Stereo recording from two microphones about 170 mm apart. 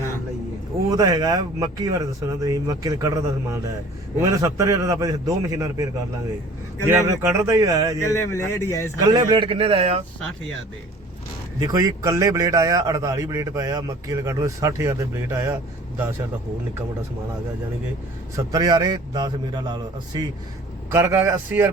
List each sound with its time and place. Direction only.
0.9 s a man's voice: 20° right (ahead or behind)
6.8 s a man's voice: 15° right (ahead or behind)
7.9 s speech: 15° left (ahead or behind)
9.1 s speech: 30° right (ahead or behind)
11.6 s a man's voice: 20° right (ahead or behind)
18.3 s a man's voice: 20° right (ahead or behind)